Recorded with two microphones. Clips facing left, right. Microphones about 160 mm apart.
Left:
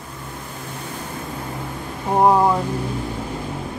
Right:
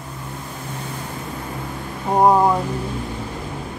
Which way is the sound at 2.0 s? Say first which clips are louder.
Right 1 dB; centre (ahead or behind).